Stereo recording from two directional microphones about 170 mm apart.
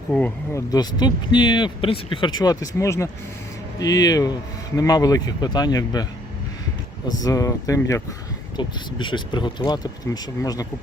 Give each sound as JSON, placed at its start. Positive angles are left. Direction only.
{"t": 0.1, "sound": "speech", "side_deg": 5}
{"t": 0.5, "sound": "speech", "side_deg": 20}
{"t": 7.2, "sound": "speech", "side_deg": 20}